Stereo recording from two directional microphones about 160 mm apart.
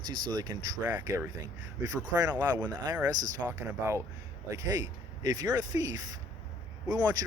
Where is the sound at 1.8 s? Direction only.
20° right (ahead or behind).